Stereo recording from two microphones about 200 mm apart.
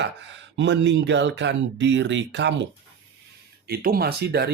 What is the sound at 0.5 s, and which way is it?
Speech, 65° right (ahead or behind).